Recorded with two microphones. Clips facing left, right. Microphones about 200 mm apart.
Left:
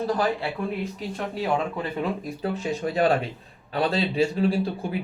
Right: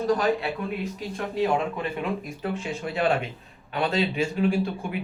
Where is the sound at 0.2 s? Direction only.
30° left (ahead or behind).